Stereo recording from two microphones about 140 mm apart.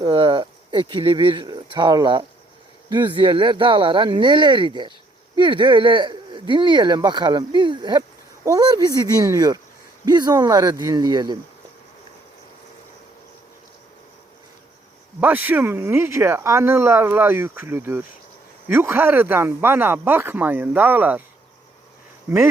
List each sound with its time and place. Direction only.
0.0 s speech: 35° right (ahead or behind)
15.2 s speech: 10° right (ahead or behind)